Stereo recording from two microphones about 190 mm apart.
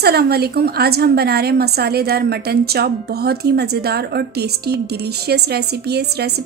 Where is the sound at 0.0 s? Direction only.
55° right (ahead or behind).